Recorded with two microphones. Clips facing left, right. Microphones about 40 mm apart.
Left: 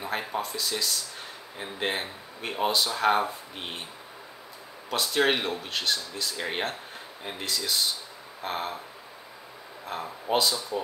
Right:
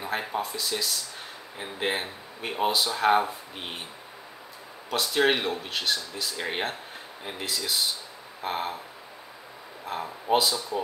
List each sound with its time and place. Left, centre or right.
0.0 s speech: centre
4.8 s speech: centre
9.8 s speech: centre